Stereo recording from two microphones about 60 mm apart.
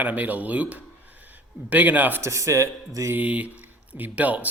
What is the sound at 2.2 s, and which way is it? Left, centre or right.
Speech, right.